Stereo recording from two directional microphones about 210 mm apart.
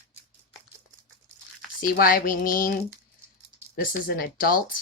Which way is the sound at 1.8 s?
45° left (ahead or behind).